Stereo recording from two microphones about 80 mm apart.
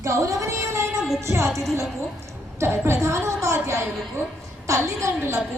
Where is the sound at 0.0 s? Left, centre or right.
Right.